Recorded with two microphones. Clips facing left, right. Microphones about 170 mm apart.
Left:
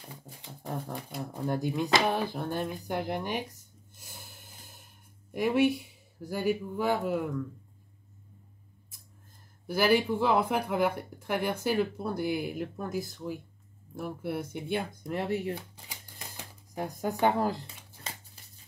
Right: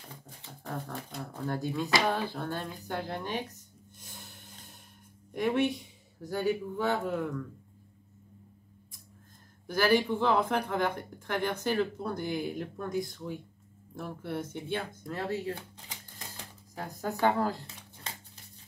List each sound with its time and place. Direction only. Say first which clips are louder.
1.1 s speech: left 3 dB; 15° left (ahead or behind)
4.0 s snort: even; 10° left (ahead or behind)
5.3 s speech: left 3 dB; 5° left (ahead or behind)
9.7 s speech: left 1 dB; 10° left (ahead or behind)
16.7 s speech: left 3 dB; 15° left (ahead or behind)